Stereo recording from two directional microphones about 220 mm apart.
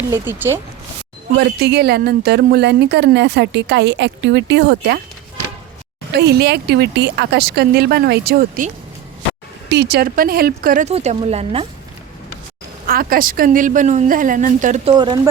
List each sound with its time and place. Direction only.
0.1 s speech: 10° right (ahead or behind)
1.4 s a woman's voice: 50° right (ahead or behind)
6.1 s a woman's voice: 50° right (ahead or behind); by 11.6 s 25° right (ahead or behind)
12.9 s speech: 40° right (ahead or behind)
14.9 s speech: 20° right (ahead or behind)